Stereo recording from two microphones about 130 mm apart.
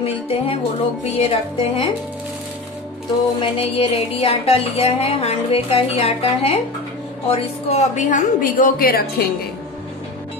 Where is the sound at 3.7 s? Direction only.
45° left (ahead or behind).